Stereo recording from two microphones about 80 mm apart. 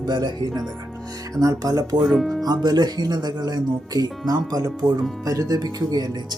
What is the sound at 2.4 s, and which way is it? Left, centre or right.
Speech, right.